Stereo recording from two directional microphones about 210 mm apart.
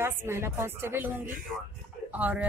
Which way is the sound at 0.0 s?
10° right (ahead or behind).